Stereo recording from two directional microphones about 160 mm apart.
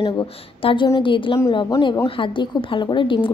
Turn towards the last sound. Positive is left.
turn(degrees=30)  # may be behind; listen again after turning